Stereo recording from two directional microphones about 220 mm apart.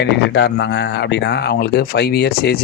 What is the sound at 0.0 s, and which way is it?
Speech, 50° left (ahead or behind).